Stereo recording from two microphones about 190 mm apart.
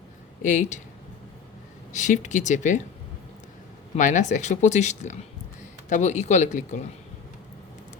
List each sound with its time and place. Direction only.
0.4 s speech: 40° left (ahead or behind)
1.9 s speech: 40° left (ahead or behind)
3.9 s speech: 40° left (ahead or behind)